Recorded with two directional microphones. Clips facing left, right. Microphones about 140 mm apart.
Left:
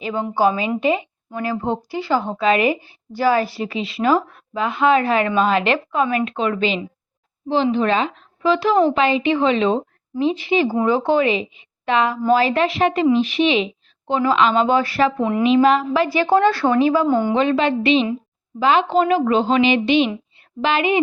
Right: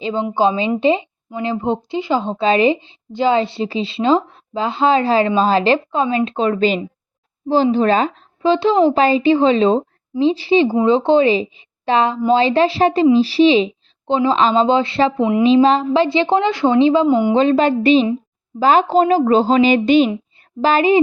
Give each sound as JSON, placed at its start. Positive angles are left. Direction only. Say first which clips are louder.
{"t": 0.0, "sound": "a woman's voice", "louder": "right 2 dB", "side_deg": -25}
{"t": 8.4, "sound": "a woman's voice", "louder": "right 2 dB", "side_deg": -25}
{"t": 10.7, "sound": "a woman's voice", "louder": "right 4 dB", "side_deg": -20}
{"t": 15.4, "sound": "a woman's voice", "louder": "right 2 dB", "side_deg": -30}
{"t": 17.3, "sound": "a woman's voice", "louder": "right 4 dB", "side_deg": -35}